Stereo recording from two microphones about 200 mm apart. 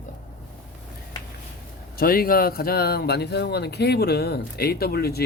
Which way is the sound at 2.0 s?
45° left (ahead or behind).